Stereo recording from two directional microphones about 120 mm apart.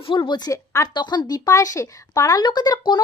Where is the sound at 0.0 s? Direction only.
45° left (ahead or behind).